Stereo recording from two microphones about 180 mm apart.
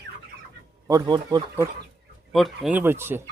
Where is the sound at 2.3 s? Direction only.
Centre (ahead or behind).